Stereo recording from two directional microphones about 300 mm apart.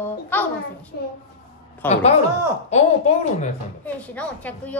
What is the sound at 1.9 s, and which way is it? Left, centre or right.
Speech, left.